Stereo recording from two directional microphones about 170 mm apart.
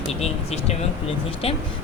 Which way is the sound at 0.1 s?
40° left (ahead or behind).